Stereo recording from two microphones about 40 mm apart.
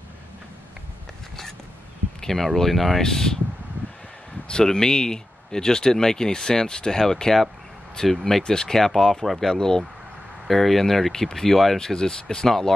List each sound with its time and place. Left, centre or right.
2.2 s speech: centre
4.5 s speech: centre
10.5 s speech: centre
11.9 s speech: centre